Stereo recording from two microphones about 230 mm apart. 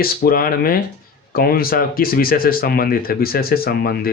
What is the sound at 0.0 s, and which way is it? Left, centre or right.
Speech, left.